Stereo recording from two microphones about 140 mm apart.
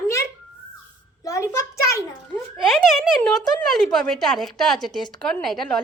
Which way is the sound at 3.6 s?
Centre (ahead or behind).